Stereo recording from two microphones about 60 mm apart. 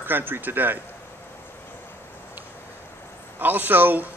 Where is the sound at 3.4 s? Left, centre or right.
Right.